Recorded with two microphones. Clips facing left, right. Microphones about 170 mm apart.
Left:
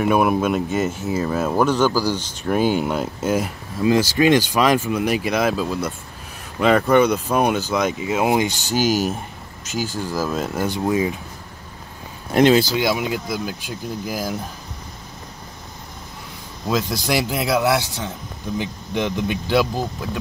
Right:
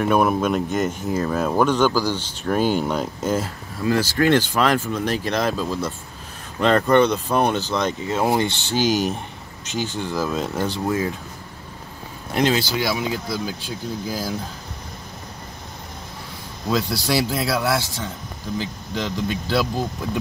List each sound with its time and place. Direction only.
0.0 s speech: 5° left (ahead or behind)
12.4 s speech: 50° left (ahead or behind)
12.7 s speech: 15° left (ahead or behind)
16.9 s speech: 15° left (ahead or behind)